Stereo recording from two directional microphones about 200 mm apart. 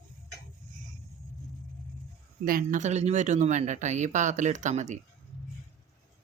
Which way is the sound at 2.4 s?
45° right (ahead or behind).